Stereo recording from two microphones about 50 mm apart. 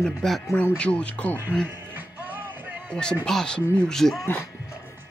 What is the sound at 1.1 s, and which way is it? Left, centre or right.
Speech, left.